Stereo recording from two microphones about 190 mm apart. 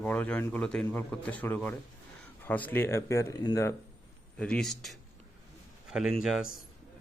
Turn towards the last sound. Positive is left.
turn(degrees=-5)  # may be behind; listen again after turning